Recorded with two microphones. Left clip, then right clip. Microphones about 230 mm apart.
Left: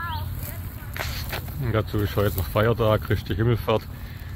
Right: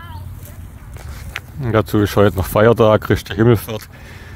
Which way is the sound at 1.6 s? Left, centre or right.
Right.